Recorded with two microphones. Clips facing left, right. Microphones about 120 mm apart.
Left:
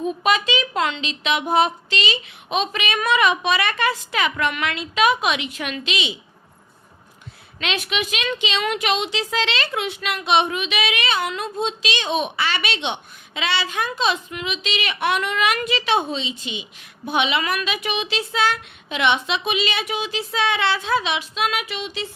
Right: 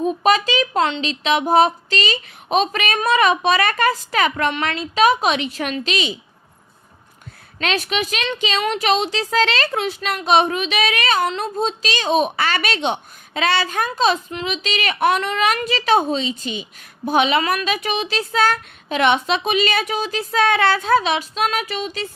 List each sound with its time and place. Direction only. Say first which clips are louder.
0.0 s a woman's voice: right 4 dB; 40° right (ahead or behind)
7.6 s a woman's voice: right 3 dB; 40° right (ahead or behind)